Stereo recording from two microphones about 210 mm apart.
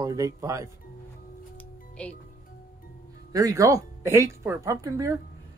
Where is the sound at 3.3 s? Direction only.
15° right (ahead or behind).